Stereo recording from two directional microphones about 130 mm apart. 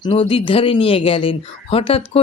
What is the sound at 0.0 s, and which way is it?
Speech, 45° left (ahead or behind).